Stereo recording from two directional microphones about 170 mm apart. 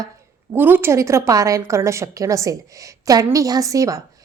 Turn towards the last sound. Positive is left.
turn(degrees=-20)  # may be behind; listen again after turning